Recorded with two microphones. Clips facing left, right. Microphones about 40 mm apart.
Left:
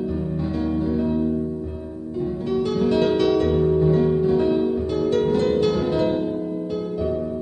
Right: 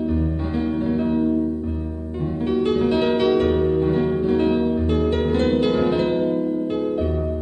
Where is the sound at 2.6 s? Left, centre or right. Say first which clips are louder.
Even; right.